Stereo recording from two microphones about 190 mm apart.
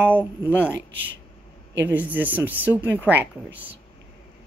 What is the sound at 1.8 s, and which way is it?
Speech, 10° right (ahead or behind).